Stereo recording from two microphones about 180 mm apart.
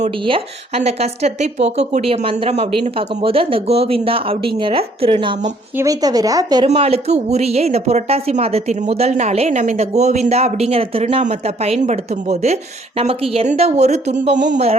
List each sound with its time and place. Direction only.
0.0 s speech: 35° right (ahead or behind)
5.7 s speech: 20° right (ahead or behind)
6.7 s speech: 35° right (ahead or behind)